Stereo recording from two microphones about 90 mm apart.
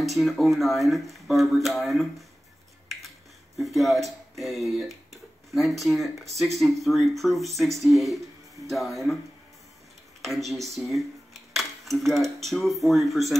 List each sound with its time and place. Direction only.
0.0 s speech: centre (ahead or behind)
3.5 s speech: centre (ahead or behind)
10.2 s speech: centre (ahead or behind)